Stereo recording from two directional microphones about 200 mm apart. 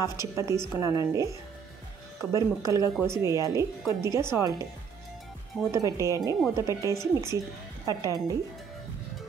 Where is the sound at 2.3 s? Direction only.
15° right (ahead or behind).